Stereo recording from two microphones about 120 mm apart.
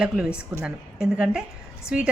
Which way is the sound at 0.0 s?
10° right (ahead or behind).